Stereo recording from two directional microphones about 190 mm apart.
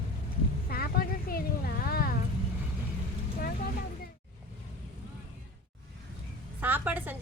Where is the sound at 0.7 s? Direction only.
50° left (ahead or behind).